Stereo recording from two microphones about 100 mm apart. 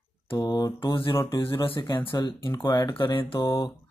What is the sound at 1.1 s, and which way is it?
Speech, 25° left (ahead or behind).